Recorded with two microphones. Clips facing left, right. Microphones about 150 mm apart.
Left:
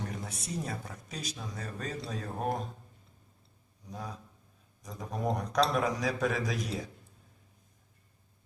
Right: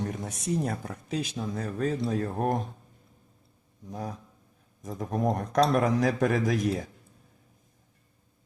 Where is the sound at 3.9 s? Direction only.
50° right (ahead or behind).